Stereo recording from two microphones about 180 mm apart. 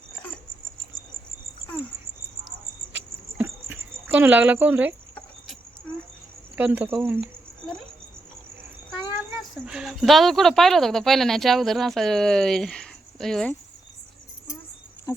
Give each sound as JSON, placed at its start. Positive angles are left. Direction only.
{"t": 3.3, "sound": "cricket", "side_deg": -10}
{"t": 6.6, "sound": "speech", "side_deg": -10}
{"t": 9.4, "sound": "speech", "side_deg": -5}